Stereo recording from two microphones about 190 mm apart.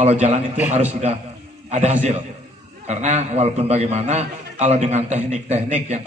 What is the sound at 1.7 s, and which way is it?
A man's voice, 35° right (ahead or behind).